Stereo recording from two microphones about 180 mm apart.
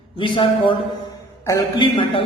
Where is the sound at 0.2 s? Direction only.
30° left (ahead or behind).